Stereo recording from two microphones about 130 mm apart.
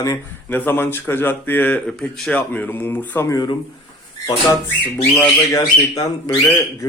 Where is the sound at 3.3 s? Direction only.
35° left (ahead or behind).